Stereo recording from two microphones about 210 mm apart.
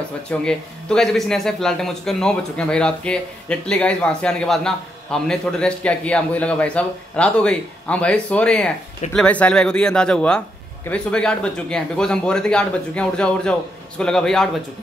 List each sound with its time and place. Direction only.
0.3 s speech: 5° left (ahead or behind)